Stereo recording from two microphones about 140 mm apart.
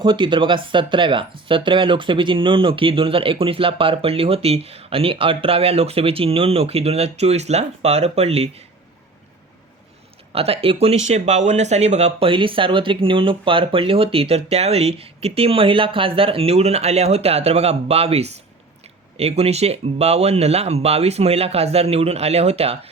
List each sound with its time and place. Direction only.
0.0 s speech: 35° right (ahead or behind)
10.3 s speech: 45° right (ahead or behind)
12.3 s speech: 35° right (ahead or behind)